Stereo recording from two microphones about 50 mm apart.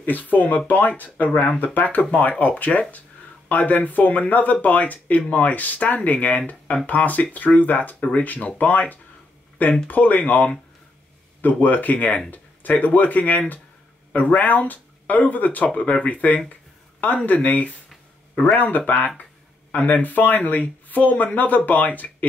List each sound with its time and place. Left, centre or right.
0.0 s speech: left
18.3 s speech: left
18.9 s speech: left